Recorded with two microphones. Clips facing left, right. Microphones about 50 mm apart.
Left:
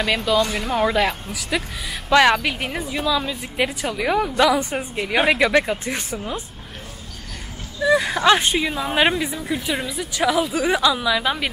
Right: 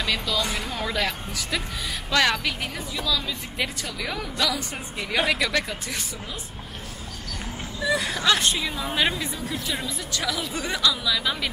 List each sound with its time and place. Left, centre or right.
0.0 s a woman's voice: centre
7.8 s a woman's voice: left
9.8 s a woman's voice: centre
10.2 s a woman's voice: left